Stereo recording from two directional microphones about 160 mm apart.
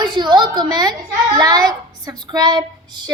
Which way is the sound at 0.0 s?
30° right (ahead or behind).